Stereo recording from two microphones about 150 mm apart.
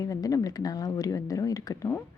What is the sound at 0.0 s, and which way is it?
Speech, 25° left (ahead or behind).